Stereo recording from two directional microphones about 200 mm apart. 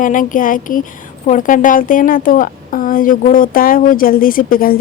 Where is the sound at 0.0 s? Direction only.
40° left (ahead or behind).